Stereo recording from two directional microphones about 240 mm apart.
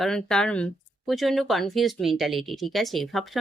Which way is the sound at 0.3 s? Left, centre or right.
Centre.